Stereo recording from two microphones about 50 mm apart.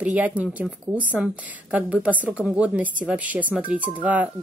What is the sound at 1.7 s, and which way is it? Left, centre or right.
Speech, right.